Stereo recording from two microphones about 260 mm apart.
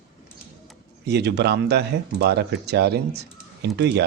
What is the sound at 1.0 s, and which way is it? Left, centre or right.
Speech, right.